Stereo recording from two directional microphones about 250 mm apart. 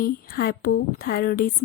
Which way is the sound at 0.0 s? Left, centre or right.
Left.